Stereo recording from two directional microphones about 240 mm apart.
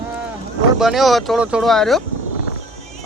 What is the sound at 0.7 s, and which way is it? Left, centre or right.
Speech, centre.